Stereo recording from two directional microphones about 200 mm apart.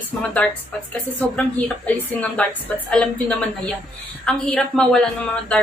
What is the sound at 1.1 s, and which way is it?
A woman's voice, 5° left (ahead or behind).